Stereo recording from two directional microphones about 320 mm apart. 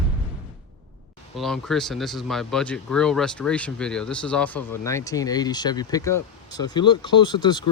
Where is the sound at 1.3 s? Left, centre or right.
Centre.